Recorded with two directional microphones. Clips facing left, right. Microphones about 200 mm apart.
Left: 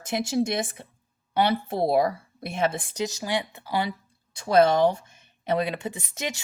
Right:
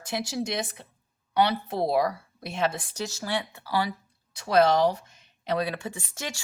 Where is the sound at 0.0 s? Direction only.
20° left (ahead or behind).